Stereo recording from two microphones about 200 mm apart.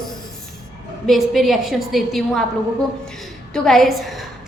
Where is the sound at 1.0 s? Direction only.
Centre (ahead or behind).